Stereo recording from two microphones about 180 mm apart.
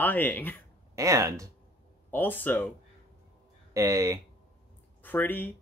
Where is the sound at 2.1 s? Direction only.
10° left (ahead or behind).